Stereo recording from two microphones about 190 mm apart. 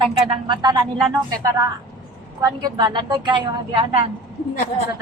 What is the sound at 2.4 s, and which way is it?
A woman's voice, 20° right (ahead or behind).